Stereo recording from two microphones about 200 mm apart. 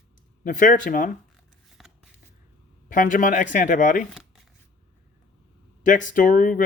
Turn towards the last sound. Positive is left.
turn(degrees=45)  # may be behind; listen again after turning